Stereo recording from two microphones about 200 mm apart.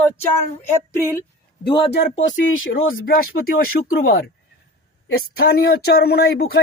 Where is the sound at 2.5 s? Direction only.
80° left.